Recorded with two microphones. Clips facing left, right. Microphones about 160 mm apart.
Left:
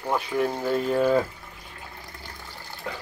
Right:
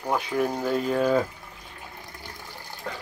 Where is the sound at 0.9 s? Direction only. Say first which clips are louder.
Left 1 dB; 5° left (ahead or behind).